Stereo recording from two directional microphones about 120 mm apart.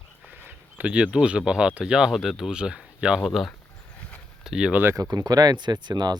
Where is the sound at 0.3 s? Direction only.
10° right (ahead or behind).